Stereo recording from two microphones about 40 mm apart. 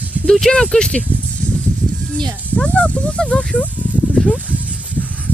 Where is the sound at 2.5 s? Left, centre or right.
Left.